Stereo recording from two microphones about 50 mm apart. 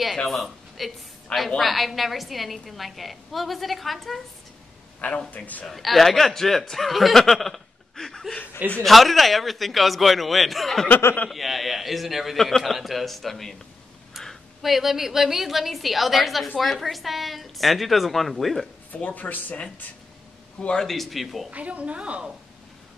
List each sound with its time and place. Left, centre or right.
0.3 s a man's voice: centre
5.3 s a man's voice: left
5.7 s a man's voice: centre
14.2 s a sound: centre
14.6 s a man's voice: centre
18.9 s speech: left
20.8 s a man's voice: centre
21.5 s a woman's voice: right